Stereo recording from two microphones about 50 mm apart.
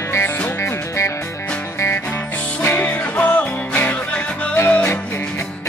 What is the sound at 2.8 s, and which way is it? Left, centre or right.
Music, left.